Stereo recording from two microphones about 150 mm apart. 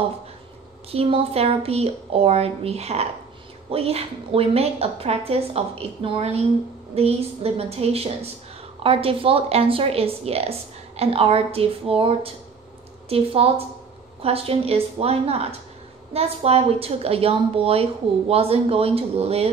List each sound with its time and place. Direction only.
0.9 s a woman's voice: 40° right (ahead or behind)